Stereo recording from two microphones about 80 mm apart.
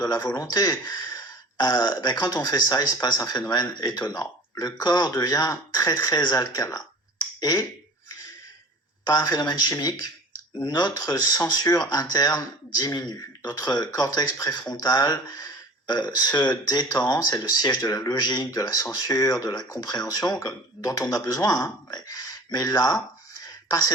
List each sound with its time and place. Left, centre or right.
0.0 s speech: left
9.1 s speech: left
23.4 s a sound: left